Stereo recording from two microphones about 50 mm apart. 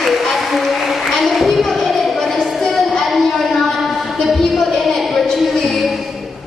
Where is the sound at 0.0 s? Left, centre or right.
Centre.